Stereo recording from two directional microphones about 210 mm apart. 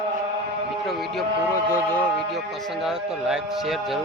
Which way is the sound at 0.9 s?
Centre (ahead or behind).